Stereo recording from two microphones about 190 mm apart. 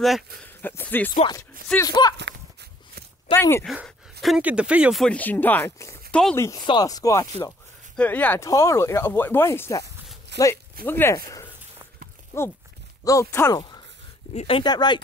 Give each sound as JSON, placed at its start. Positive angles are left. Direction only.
{"t": 0.4, "sound": "speech", "side_deg": 10}
{"t": 1.9, "sound": "speech", "side_deg": 20}
{"t": 3.3, "sound": "speech", "side_deg": 15}
{"t": 3.6, "sound": "speech", "side_deg": 0}
{"t": 10.3, "sound": "a sound", "side_deg": -65}
{"t": 10.9, "sound": "speech", "side_deg": 10}
{"t": 14.3, "sound": "speech", "side_deg": 35}
{"t": 14.6, "sound": "speech", "side_deg": 20}